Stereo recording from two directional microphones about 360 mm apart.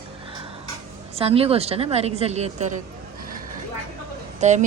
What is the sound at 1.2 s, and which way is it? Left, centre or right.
A woman's voice, centre.